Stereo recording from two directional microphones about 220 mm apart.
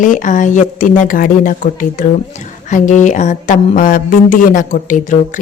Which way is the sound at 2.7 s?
35° left (ahead or behind).